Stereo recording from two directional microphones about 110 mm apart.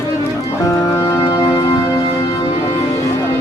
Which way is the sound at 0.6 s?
30° left (ahead or behind).